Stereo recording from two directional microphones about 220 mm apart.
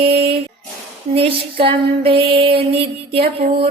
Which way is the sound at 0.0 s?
25° right (ahead or behind).